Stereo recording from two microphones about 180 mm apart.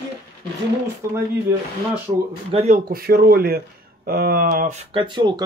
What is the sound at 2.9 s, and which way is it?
Speech, 55° right (ahead or behind).